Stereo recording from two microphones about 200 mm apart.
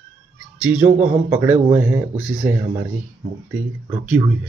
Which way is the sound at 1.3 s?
10° right (ahead or behind).